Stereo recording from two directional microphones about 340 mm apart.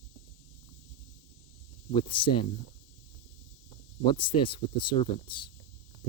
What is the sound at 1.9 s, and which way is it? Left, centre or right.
Speech, centre.